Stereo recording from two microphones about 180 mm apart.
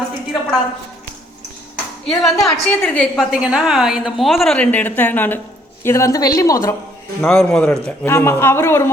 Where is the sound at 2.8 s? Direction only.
10° left (ahead or behind).